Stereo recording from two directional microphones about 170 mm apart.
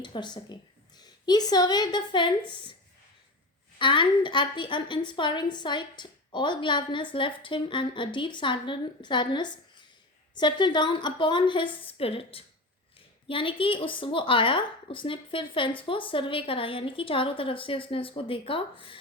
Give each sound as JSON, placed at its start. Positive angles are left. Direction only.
{"t": 0.0, "sound": "a woman's voice", "side_deg": 25}
{"t": 3.8, "sound": "a woman's voice", "side_deg": 30}